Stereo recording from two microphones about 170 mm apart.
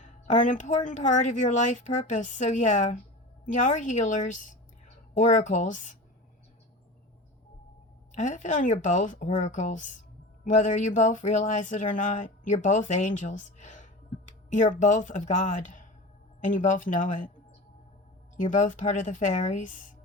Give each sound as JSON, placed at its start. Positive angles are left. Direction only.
{"t": 0.0, "sound": "speech", "side_deg": 45}
{"t": 8.1, "sound": "speech", "side_deg": 45}
{"t": 18.3, "sound": "speech", "side_deg": 50}